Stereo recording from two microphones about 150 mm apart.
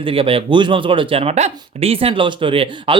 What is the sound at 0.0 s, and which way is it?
Speech, 35° right (ahead or behind).